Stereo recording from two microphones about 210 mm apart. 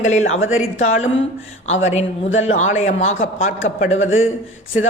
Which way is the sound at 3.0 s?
65° left (ahead or behind).